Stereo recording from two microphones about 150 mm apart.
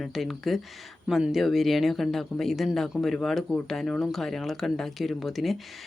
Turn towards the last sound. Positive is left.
turn(degrees=0)  # may be behind; listen again after turning